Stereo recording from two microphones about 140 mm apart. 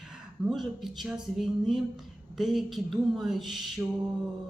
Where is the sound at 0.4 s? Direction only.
Centre (ahead or behind).